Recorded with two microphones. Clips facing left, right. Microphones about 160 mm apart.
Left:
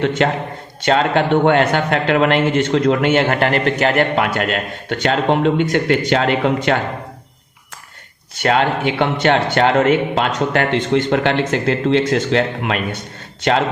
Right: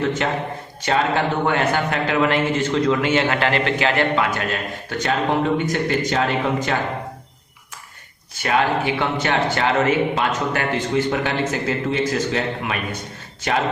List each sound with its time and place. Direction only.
0.2 s a man's voice: 65° left (ahead or behind)
8.4 s a man's voice: 70° left (ahead or behind)